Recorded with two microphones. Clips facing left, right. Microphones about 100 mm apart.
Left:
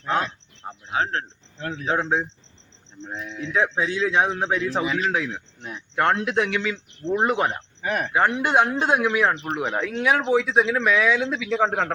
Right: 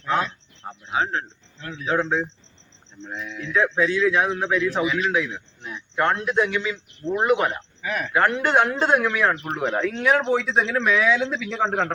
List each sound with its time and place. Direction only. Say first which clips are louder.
0.6 s a man's voice: even; 10° left (ahead or behind)
1.5 s speech: left 4 dB; 55° left (ahead or behind)
2.0 s a man's voice: right 1 dB; 20° left (ahead or behind); by 6.1 s 45° left (ahead or behind)
6.1 s a man's voice: even; 70° left (ahead or behind)
7.1 s speech: right 1 dB; 30° left (ahead or behind)
7.9 s speech: left 2 dB; 45° left (ahead or behind)
8.1 s a man's voice: right 1 dB; 20° left (ahead or behind)
9.6 s speech: right 1 dB; 5° left (ahead or behind)